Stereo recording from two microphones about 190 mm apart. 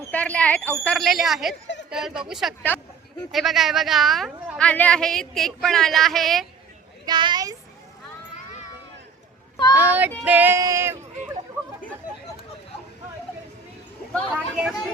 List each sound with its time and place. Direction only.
0.1 s a woman's voice: 5° left (ahead or behind)
7.0 s speech: 25° right (ahead or behind)
9.7 s a sound: 10° right (ahead or behind)
14.3 s a woman's voice: 5° right (ahead or behind)